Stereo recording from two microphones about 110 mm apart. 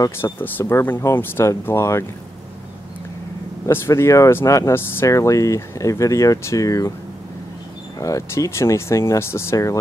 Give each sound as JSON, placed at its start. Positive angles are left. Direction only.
{"t": 0.2, "sound": "speech", "side_deg": 20}
{"t": 3.6, "sound": "speech", "side_deg": 25}
{"t": 8.0, "sound": "speech", "side_deg": 30}